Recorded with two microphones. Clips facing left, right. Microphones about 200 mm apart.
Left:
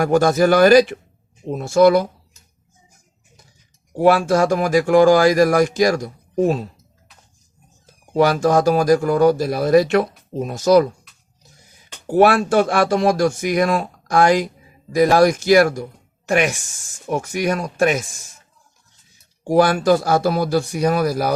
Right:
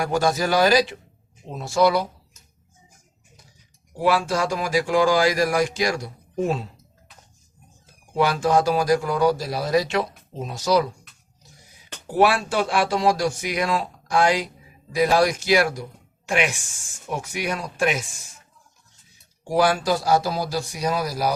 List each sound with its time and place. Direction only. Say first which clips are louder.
0.0 s speech: left 7 dB; 50° left (ahead or behind)
3.9 s speech: left 7 dB; 50° left (ahead or behind)
8.1 s speech: left 4 dB; 40° left (ahead or behind)
12.0 s speech: left 5 dB; 50° left (ahead or behind)
19.5 s a man's voice: left 6 dB; 50° left (ahead or behind)